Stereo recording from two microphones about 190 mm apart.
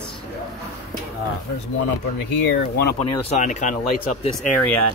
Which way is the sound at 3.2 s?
35° left (ahead or behind).